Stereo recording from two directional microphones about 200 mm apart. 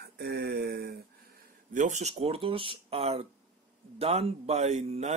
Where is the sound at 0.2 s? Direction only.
55° right (ahead or behind).